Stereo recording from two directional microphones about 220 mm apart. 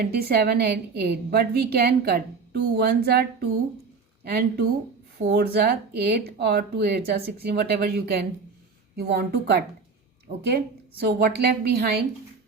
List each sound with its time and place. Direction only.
0.0 s a woman's voice: 45° right (ahead or behind)